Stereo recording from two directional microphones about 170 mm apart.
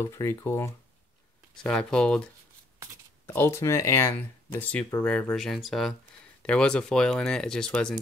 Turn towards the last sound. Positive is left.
turn(degrees=5)  # may be behind; listen again after turning